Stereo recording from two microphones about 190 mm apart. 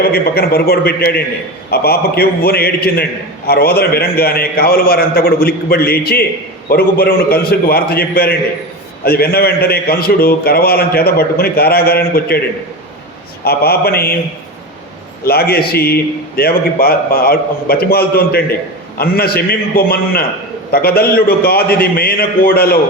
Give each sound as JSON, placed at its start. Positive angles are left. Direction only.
{"t": 0.0, "sound": "a man's voice", "side_deg": 55}
{"t": 13.4, "sound": "a man's voice", "side_deg": 55}
{"t": 15.2, "sound": "a man's voice", "side_deg": 55}